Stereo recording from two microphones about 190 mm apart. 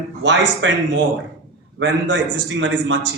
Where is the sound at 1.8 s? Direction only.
75° right (ahead or behind).